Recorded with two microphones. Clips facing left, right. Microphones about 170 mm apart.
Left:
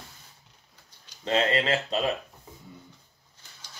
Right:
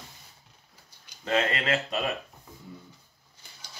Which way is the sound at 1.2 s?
30° left (ahead or behind).